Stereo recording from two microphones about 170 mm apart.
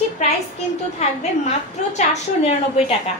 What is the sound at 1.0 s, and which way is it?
Speech, 40° left (ahead or behind).